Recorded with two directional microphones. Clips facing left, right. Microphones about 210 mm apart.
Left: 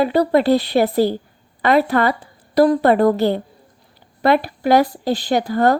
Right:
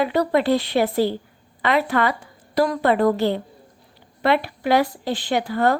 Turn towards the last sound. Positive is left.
turn(degrees=40)  # may be behind; listen again after turning